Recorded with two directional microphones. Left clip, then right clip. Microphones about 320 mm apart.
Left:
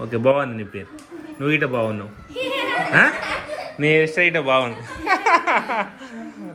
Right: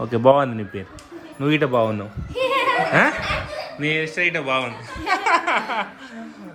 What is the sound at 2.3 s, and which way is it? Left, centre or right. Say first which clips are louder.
Opera: right 4 dB; right.